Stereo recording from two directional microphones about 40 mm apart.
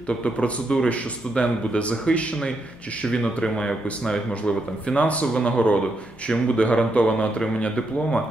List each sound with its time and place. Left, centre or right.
0.2 s speech: left
4.5 s speech: left